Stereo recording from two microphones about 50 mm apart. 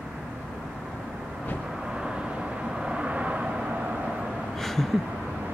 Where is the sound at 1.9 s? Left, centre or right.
Centre.